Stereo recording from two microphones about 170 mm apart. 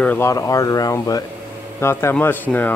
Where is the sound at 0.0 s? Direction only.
10° left (ahead or behind).